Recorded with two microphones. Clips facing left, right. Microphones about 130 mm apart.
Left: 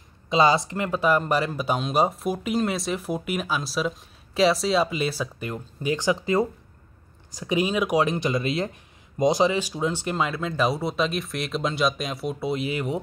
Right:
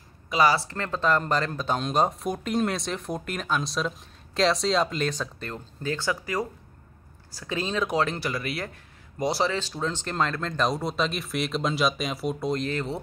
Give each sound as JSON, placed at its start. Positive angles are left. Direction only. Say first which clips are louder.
{"t": 0.3, "sound": "speech", "louder": "left 3 dB", "side_deg": 20}